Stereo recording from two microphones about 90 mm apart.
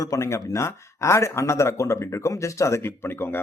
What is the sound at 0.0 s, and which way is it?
Speech, 35° left (ahead or behind).